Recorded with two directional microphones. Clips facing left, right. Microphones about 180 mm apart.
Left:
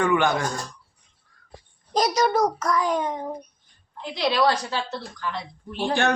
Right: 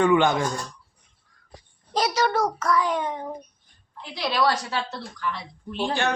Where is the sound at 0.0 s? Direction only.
20° right (ahead or behind).